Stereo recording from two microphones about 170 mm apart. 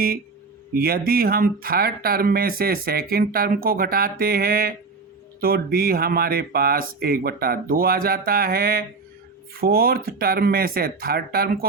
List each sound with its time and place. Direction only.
0.7 s speech: 60° right (ahead or behind)